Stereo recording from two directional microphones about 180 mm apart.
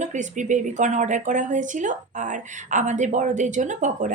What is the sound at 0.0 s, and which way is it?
Speech, 45° right (ahead or behind).